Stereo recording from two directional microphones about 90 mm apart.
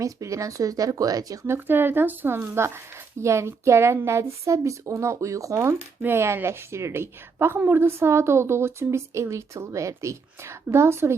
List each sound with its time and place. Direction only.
0.0 s speech: 35° right (ahead or behind)
1.5 s a woman's voice: 25° right (ahead or behind)